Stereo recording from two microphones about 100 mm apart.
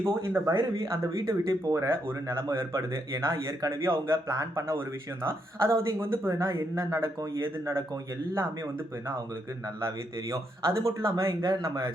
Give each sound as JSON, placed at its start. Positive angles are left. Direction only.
{"t": 0.0, "sound": "speech", "side_deg": -25}
{"t": 9.8, "sound": "speech", "side_deg": -30}